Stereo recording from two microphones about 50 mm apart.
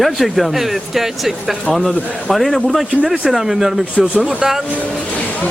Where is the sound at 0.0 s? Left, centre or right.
Centre.